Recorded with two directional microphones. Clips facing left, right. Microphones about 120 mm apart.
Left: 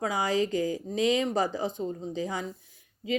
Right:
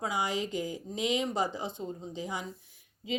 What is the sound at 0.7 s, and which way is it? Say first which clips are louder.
Speech: left 6 dB; 90° left.